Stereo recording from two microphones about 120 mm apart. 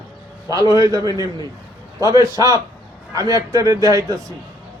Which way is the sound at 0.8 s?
30° right (ahead or behind).